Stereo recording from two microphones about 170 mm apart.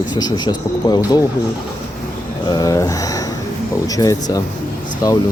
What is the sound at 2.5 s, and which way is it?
Speech, 20° left (ahead or behind).